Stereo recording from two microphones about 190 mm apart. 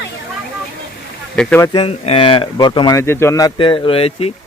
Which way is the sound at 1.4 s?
5° left (ahead or behind).